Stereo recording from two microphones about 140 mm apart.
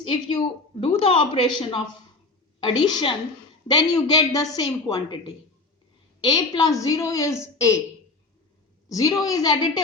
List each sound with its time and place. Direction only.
0.1 s a woman's voice: 40° left (ahead or behind)
6.2 s a woman's voice: 30° left (ahead or behind)
8.9 s a woman's voice: 25° left (ahead or behind)